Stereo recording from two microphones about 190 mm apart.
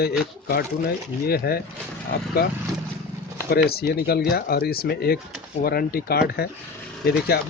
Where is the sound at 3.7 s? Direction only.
55° left (ahead or behind).